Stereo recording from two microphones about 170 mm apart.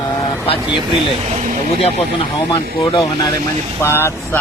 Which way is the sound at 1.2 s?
45° right (ahead or behind).